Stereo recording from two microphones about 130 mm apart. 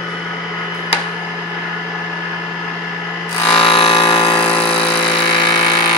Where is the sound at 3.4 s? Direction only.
45° left (ahead or behind).